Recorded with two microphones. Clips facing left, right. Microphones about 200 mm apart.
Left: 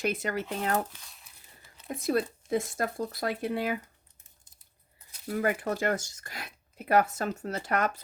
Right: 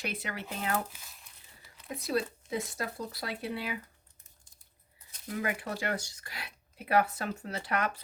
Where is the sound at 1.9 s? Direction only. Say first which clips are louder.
Left 4 dB; 50° left (ahead or behind).